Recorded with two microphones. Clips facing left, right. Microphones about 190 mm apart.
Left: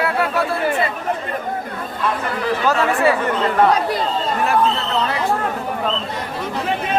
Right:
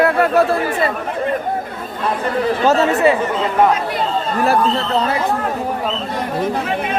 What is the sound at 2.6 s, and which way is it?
Speech, 25° right (ahead or behind).